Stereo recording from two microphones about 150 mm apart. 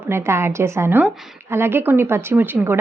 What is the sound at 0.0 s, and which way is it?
A woman's voice, 15° right (ahead or behind).